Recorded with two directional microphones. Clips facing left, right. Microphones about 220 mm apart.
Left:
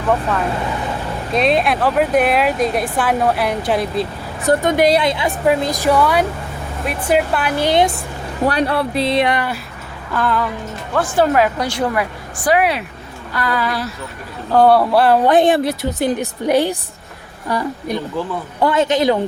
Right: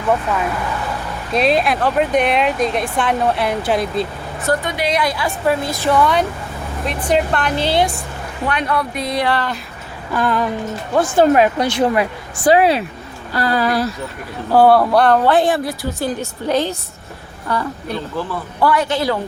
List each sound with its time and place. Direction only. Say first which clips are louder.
1.3 s speech: even; centre (ahead or behind)
4.6 s a woman's voice: left 7 dB; 45° left (ahead or behind)
4.9 s a woman's voice: left 2 dB; 20° left (ahead or behind)
8.4 s a woman's voice: left 3 dB; 35° left (ahead or behind); by 9.6 s 15° left (ahead or behind)
10.1 s a sound: right 1 dB; 15° right (ahead or behind)
10.9 s speech: right 2 dB; 20° right (ahead or behind); by 13.8 s 40° right (ahead or behind)
14.5 s speech: even; 5° right (ahead or behind)
15.2 s a woman's voice: left 2 dB; 20° left (ahead or behind)